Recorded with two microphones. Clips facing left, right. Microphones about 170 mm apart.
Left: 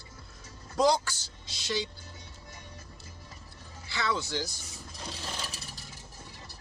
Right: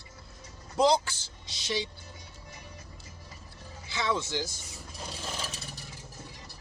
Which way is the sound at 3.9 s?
20° right (ahead or behind).